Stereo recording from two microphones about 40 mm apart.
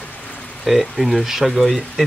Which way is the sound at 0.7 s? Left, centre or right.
Centre.